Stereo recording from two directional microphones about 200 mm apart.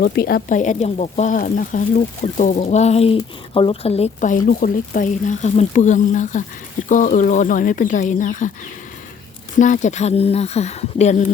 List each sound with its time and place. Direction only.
0.0 s speech: 50° left (ahead or behind)
9.6 s speech: 40° left (ahead or behind)